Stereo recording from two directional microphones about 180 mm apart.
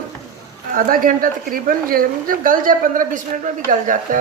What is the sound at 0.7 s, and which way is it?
A woman's voice, 50° right (ahead or behind).